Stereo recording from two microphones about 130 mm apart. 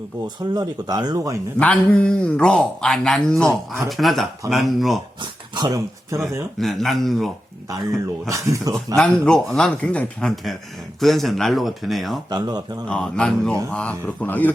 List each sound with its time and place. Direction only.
0.3 s speech: 30° right (ahead or behind)
1.5 s speech: 10° left (ahead or behind)
5.2 s speech: 30° right (ahead or behind)
6.6 s speech: centre (ahead or behind)
8.3 s speech: 25° right (ahead or behind)
9.0 s speech: 5° left (ahead or behind)
12.3 s speech: 30° right (ahead or behind)
12.9 s speech: 5° left (ahead or behind)